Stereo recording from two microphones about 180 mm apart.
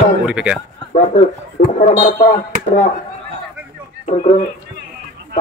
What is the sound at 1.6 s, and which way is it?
Speech, 45° left (ahead or behind).